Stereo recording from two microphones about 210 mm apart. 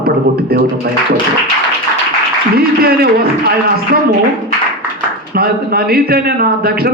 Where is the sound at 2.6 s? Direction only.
45° right (ahead or behind).